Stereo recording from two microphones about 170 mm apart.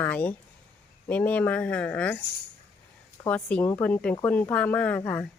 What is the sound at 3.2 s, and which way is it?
Speech, 10° left (ahead or behind).